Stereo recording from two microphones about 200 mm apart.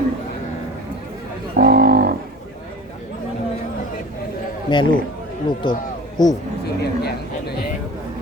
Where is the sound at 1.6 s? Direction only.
50° right (ahead or behind).